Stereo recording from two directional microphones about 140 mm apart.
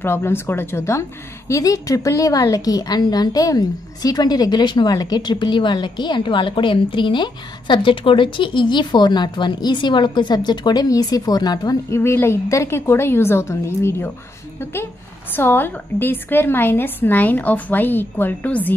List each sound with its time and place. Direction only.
0.0 s a woman's voice: 15° left (ahead or behind)